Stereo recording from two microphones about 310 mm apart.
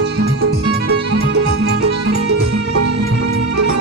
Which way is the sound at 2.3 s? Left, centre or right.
Right.